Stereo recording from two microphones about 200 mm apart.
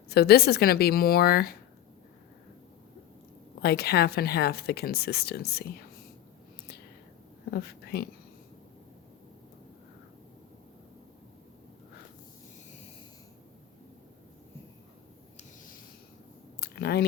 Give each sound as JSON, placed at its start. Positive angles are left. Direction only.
{"t": 0.1, "sound": "speech", "side_deg": 55}
{"t": 3.6, "sound": "speech", "side_deg": 55}
{"t": 7.5, "sound": "a woman's voice", "side_deg": 50}
{"t": 16.6, "sound": "a sound", "side_deg": 50}